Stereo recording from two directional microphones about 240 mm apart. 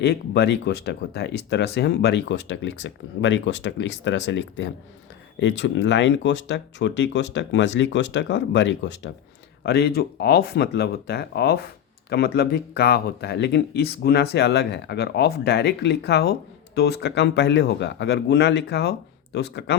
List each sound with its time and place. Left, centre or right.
0.0 s speech: left